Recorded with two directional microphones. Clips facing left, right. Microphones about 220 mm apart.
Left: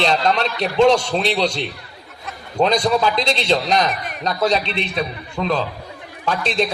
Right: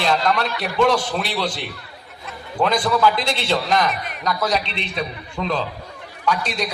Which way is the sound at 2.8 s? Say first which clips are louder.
Left 1 dB; 20° left (ahead or behind).